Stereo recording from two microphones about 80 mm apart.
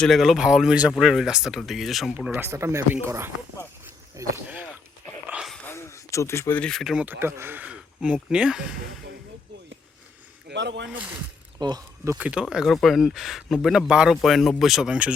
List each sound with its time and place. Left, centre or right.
0.0 s speech: centre
2.3 s speech: right
4.1 s speech: right
4.4 s a sound: centre
5.6 s a sound: left
6.6 s speech: centre
7.0 s speech: right
7.6 s speech: centre
11.6 s speech: right
12.1 s speech: centre